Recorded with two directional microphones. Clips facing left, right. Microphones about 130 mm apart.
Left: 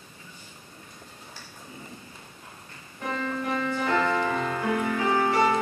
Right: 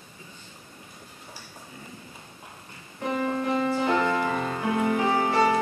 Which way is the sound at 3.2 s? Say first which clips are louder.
Right 3 dB; 20° right (ahead or behind).